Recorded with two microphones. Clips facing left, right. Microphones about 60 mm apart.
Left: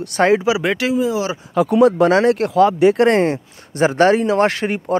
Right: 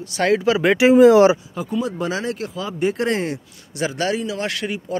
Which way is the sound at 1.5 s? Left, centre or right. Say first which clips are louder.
Left 11 dB; left.